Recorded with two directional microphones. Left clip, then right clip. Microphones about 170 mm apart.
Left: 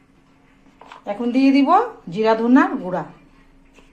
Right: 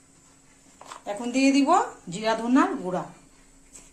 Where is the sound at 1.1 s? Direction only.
20° left (ahead or behind).